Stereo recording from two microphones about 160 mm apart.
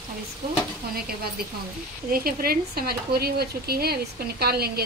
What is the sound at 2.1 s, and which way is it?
Speech, 70° right (ahead or behind).